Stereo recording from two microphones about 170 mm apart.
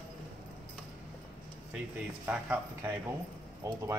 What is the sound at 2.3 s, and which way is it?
Speech, 10° right (ahead or behind).